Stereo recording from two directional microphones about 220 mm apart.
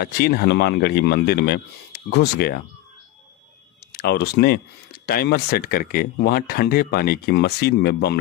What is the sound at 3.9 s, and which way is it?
Speech, 45° left (ahead or behind).